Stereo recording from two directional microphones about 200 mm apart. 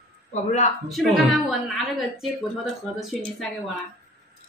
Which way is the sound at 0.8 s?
Centre (ahead or behind).